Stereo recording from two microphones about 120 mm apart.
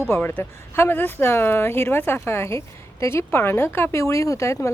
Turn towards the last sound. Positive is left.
turn(degrees=25)  # may be behind; listen again after turning